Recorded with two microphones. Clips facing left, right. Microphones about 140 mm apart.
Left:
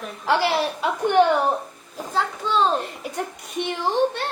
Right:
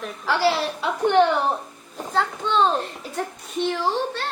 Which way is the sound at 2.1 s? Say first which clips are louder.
Right 1 dB; centre (ahead or behind).